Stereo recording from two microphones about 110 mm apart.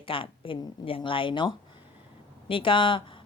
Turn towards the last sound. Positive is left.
turn(degrees=50)  # may be behind; listen again after turning